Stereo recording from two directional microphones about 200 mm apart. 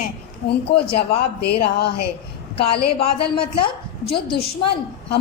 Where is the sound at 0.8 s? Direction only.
30° left (ahead or behind).